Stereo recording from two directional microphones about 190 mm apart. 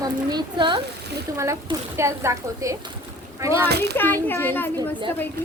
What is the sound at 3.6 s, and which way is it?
Speech, 60° right (ahead or behind).